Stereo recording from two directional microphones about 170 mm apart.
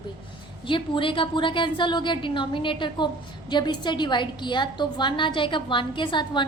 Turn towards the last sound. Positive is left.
turn(degrees=25)  # may be behind; listen again after turning